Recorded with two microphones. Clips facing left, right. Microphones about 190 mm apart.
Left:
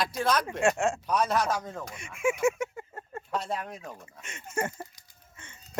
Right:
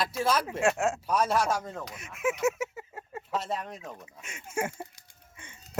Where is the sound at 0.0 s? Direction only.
5° right (ahead or behind).